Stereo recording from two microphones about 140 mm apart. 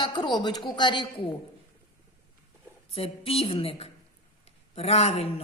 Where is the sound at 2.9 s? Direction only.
45° left (ahead or behind).